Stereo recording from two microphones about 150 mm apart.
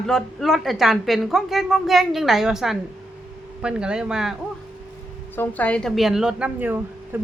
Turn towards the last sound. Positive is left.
turn(degrees=-15)  # may be behind; listen again after turning